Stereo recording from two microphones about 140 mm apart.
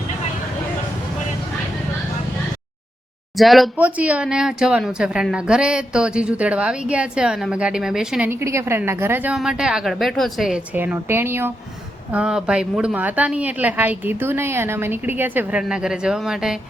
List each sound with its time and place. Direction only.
3.3 s a woman's voice: centre (ahead or behind)
3.8 s a woman's voice: 10° right (ahead or behind)
8.3 s a woman's voice: 20° right (ahead or behind); by 10.6 s centre (ahead or behind)
10.8 s a woman's voice: 15° right (ahead or behind)